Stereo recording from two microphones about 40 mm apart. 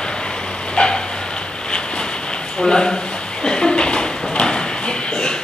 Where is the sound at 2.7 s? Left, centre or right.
Centre.